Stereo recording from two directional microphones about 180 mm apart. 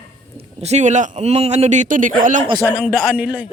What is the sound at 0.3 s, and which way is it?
A man's voice, 35° right (ahead or behind).